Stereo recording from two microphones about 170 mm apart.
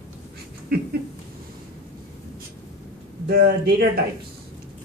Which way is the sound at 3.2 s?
65° right (ahead or behind).